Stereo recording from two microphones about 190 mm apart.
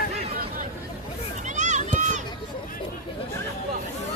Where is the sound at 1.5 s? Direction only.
40° right (ahead or behind).